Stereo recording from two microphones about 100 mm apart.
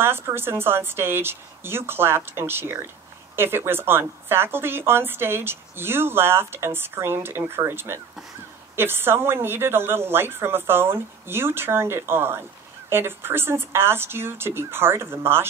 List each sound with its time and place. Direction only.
0.0 s speech: 25° right (ahead or behind)